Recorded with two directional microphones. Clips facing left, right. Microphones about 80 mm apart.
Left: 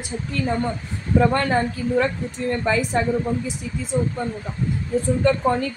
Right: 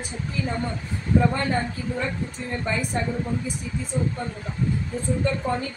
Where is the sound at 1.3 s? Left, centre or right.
Left.